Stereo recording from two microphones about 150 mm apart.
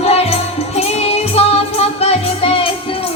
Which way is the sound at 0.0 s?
40° left (ahead or behind).